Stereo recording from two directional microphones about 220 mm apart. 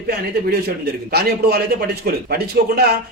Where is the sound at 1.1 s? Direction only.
45° right (ahead or behind).